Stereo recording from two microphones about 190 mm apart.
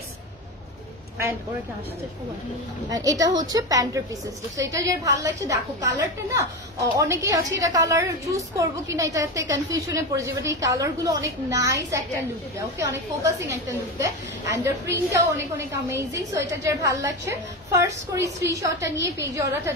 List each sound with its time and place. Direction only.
2.9 s a woman's voice: 20° right (ahead or behind)